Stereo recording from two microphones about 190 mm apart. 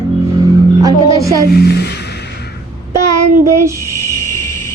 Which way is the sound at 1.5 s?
60° left (ahead or behind).